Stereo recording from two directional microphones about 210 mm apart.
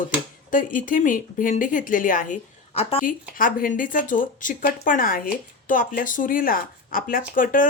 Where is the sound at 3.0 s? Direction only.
40° left (ahead or behind).